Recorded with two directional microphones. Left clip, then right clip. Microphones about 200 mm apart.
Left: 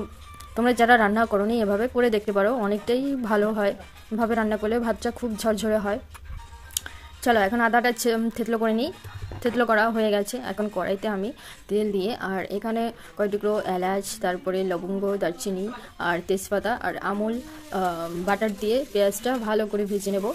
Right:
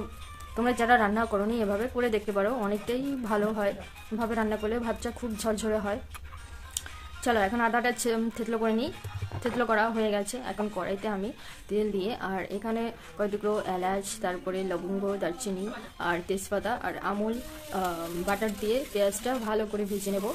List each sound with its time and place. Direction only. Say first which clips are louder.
0.6 s speech: left 5 dB; 30° left (ahead or behind)
6.8 s music: left 6 dB; 30° left (ahead or behind)
7.2 s speech: left 5 dB; 30° left (ahead or behind)